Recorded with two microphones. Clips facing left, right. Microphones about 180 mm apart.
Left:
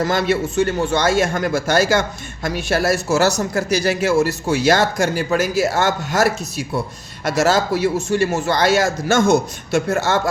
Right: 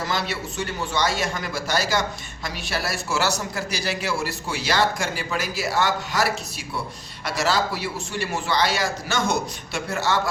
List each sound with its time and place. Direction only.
0.0 s a man's voice: 50° left (ahead or behind)